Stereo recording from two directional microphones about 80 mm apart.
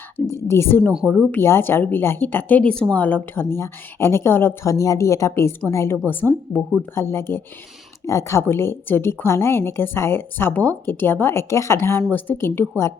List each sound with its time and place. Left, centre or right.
0.3 s a woman's voice: left